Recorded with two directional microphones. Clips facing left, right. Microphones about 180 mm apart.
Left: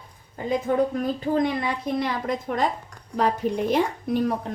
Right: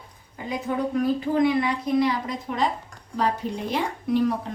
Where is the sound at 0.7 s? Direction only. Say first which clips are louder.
Left 5 dB; 45° left (ahead or behind).